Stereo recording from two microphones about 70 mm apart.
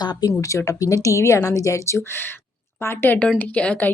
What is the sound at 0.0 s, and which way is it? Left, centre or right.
Speech, left.